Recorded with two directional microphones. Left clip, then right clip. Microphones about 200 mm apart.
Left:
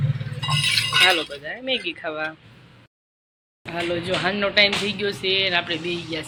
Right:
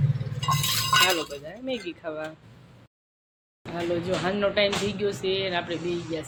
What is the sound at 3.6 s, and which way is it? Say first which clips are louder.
Speech: left 3 dB; centre (ahead or behind).